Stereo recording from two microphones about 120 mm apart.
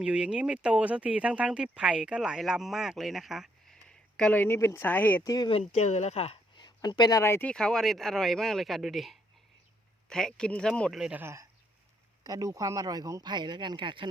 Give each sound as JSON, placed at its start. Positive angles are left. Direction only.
{"t": 0.0, "sound": "speech", "side_deg": -10}
{"t": 5.2, "sound": "speech", "side_deg": 30}
{"t": 5.5, "sound": "speech", "side_deg": 60}
{"t": 6.6, "sound": "a sound", "side_deg": 40}
{"t": 7.2, "sound": "speech", "side_deg": 20}
{"t": 7.5, "sound": "speech", "side_deg": 5}
{"t": 11.2, "sound": "speech", "side_deg": -20}